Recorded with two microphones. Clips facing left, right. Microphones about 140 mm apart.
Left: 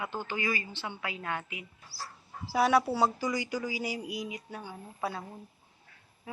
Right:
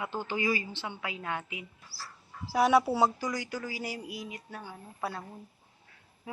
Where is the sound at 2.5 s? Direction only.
Centre (ahead or behind).